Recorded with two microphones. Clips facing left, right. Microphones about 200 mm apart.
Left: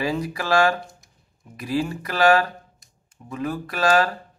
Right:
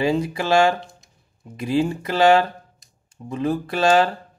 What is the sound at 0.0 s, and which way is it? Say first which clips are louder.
Speech: right 4 dB; 25° right (ahead or behind).